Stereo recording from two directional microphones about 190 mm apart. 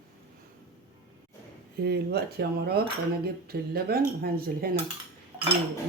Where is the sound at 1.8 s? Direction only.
60° right (ahead or behind).